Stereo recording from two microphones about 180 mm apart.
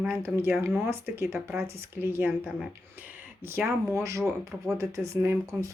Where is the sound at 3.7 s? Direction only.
15° right (ahead or behind).